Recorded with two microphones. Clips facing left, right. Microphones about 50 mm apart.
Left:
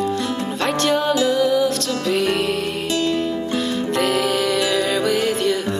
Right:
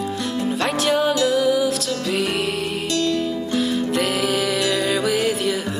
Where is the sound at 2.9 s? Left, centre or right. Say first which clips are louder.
Left 1 dB; centre.